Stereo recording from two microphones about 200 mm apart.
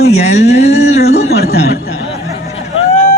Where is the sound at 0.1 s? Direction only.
35° left (ahead or behind).